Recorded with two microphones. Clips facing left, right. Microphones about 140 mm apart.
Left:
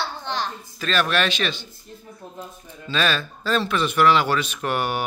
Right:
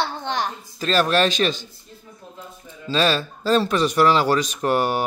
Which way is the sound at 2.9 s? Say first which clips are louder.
Right 3 dB; 35° right (ahead or behind).